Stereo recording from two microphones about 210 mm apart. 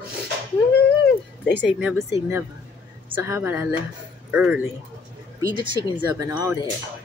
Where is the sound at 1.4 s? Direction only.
55° left (ahead or behind).